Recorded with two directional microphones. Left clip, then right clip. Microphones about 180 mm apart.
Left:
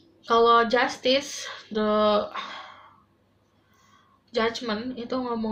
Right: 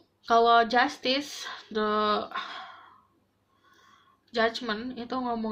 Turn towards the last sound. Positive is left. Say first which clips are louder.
# left 2 dB
turn(degrees=-40)  # may be behind; listen again after turning